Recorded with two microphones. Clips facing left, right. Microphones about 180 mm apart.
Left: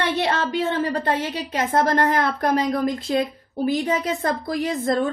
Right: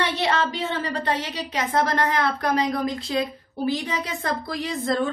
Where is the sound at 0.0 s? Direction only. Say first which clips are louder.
Left 1 dB; 55° left (ahead or behind).